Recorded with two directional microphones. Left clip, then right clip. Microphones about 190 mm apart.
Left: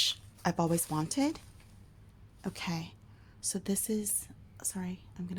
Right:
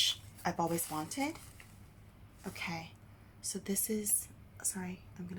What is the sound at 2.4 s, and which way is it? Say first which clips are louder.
A woman's voice: left 2 dB; 55° left (ahead or behind).